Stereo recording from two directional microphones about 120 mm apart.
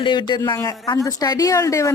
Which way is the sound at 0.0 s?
40° left (ahead or behind).